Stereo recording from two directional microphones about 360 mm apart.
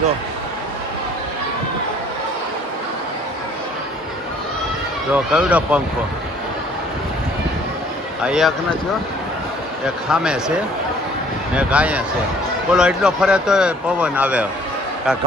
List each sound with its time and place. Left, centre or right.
5.1 s speech: centre
8.2 s speech: centre
9.8 s speech: centre